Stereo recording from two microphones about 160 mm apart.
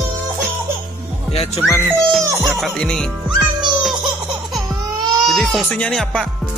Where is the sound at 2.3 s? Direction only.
20° right (ahead or behind).